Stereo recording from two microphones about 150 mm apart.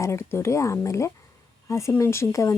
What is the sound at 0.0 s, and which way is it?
Speech, 20° left (ahead or behind).